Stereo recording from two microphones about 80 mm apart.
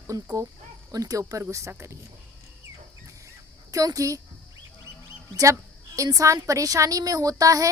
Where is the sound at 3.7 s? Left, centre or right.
Right.